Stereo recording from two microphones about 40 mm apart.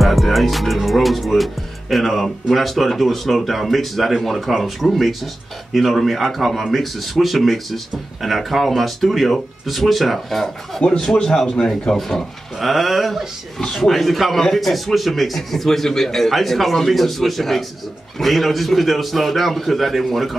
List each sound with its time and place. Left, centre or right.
0.0 s music: centre
2.5 s speech: centre
11.1 s a man's voice: centre